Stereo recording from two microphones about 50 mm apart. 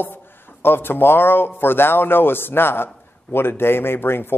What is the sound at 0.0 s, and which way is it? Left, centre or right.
Speech, left.